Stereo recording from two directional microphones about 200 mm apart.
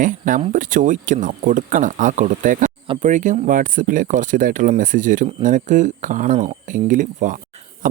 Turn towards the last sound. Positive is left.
turn(degrees=-45)  # may be behind; listen again after turning